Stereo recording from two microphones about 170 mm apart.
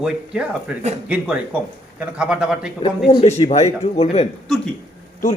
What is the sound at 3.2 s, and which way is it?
Speech, 40° left (ahead or behind).